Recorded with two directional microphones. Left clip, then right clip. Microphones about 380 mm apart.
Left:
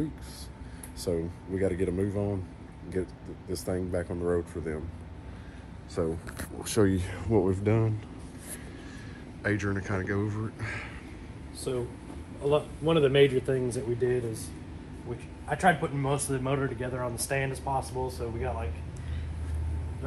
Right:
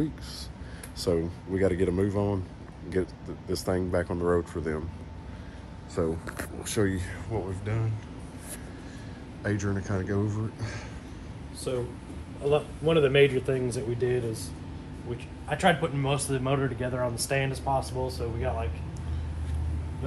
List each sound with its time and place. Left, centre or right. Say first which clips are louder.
0.9 s speech: right 4 dB; centre
5.9 s speech: right 2 dB; centre
7.7 s speech: left 8 dB; centre
9.4 s speech: left 1 dB; centre
11.7 s speech: right 1 dB; centre
13.7 s speech: even; centre
15.4 s speech: even; centre